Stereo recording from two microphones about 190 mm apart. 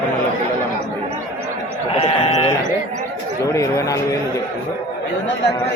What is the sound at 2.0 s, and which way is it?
Sheep, 30° left (ahead or behind).